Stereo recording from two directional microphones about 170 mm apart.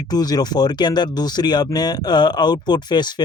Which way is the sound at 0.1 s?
25° left (ahead or behind).